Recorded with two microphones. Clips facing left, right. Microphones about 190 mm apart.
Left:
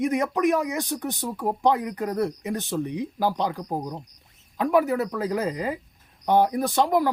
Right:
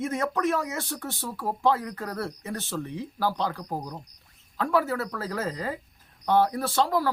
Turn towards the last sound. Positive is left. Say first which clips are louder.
# left 3 dB
turn(degrees=20)  # may be behind; listen again after turning